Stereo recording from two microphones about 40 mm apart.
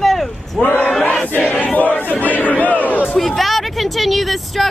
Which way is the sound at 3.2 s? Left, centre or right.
Centre.